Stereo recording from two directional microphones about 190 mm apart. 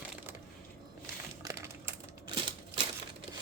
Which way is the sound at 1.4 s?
15° right (ahead or behind).